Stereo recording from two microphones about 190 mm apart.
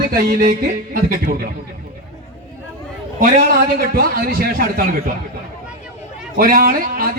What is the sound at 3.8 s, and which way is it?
Speech, 50° right (ahead or behind).